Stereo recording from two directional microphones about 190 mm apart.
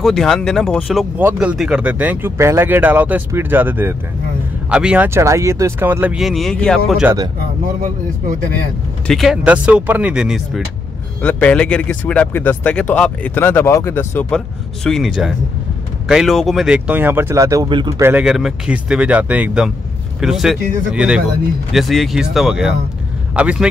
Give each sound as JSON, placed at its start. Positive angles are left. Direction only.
{"t": 0.0, "sound": "speech", "side_deg": 0}
{"t": 7.6, "sound": "speech", "side_deg": -45}
{"t": 9.0, "sound": "speech", "side_deg": 0}
{"t": 11.2, "sound": "speech", "side_deg": 5}
{"t": 18.2, "sound": "speech", "side_deg": -5}